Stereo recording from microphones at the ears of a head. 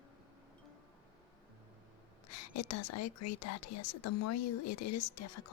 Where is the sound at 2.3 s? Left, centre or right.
Left.